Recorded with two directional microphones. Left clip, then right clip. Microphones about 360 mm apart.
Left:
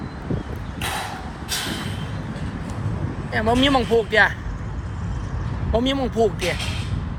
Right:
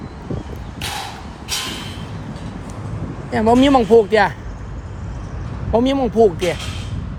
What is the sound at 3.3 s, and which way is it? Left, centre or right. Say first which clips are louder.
Speech: right 5 dB; right.